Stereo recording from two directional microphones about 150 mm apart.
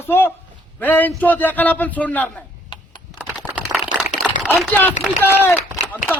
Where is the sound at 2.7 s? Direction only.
30° left (ahead or behind).